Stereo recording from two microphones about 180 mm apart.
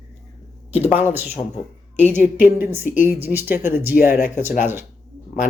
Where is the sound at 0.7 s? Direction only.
35° left (ahead or behind).